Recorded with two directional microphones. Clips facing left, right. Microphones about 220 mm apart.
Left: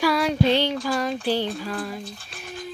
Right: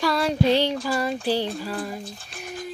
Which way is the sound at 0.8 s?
5° right (ahead or behind).